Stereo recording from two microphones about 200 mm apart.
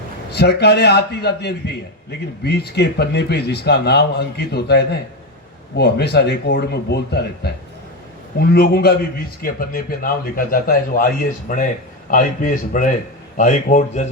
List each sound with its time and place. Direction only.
0.3 s a man's voice: 55° left (ahead or behind)
8.5 s speech: 50° left (ahead or behind)